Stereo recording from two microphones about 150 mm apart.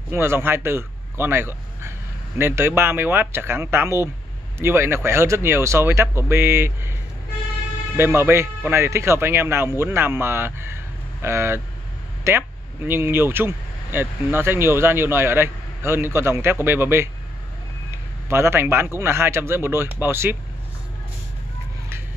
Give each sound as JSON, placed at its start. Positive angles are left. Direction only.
{"t": 0.1, "sound": "a man's voice", "side_deg": -15}